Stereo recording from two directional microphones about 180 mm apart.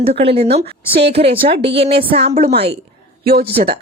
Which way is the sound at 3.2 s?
55° right (ahead or behind).